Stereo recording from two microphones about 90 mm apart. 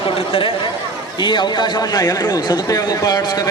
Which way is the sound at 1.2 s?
60° left (ahead or behind).